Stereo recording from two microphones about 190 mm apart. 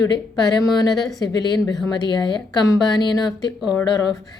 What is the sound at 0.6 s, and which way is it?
Speech, 20° left (ahead or behind).